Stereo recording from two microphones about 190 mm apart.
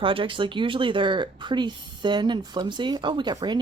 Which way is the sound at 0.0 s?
25° right (ahead or behind).